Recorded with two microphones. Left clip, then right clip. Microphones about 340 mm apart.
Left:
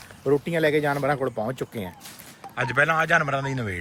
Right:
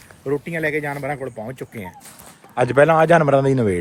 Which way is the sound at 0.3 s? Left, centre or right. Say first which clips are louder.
Left 1 dB; centre.